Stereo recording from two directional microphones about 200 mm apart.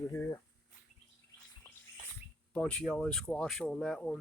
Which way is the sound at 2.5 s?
5° left (ahead or behind).